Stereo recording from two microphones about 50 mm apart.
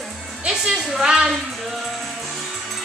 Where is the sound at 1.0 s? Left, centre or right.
Centre.